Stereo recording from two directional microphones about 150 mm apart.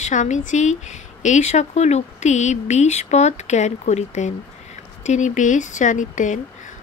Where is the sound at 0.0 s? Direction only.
55° left (ahead or behind).